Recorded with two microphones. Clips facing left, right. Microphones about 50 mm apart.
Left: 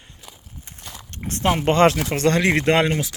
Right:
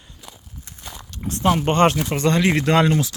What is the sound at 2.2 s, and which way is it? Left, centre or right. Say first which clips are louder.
Speech: even; left.